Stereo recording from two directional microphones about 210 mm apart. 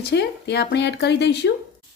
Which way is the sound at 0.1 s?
50° left (ahead or behind).